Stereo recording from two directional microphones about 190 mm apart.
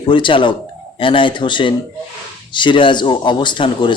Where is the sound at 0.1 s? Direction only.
25° left (ahead or behind).